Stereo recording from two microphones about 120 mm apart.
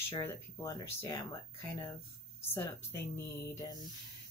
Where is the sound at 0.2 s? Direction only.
25° left (ahead or behind).